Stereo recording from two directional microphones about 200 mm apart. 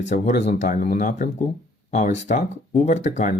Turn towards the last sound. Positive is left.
turn(degrees=35)  # may be behind; listen again after turning